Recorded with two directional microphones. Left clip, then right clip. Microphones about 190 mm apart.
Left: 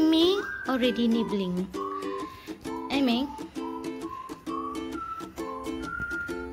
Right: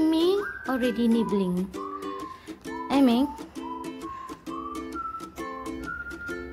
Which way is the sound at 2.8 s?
25° right (ahead or behind).